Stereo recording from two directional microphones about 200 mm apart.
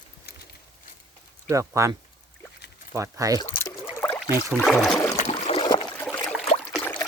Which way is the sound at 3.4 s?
15° left (ahead or behind).